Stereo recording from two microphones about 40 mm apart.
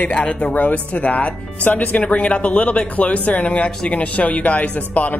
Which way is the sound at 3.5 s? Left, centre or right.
Left.